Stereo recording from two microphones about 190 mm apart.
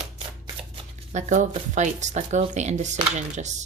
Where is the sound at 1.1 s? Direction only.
40° right (ahead or behind).